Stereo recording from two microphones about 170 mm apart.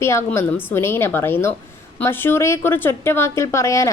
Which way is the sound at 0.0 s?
15° left (ahead or behind).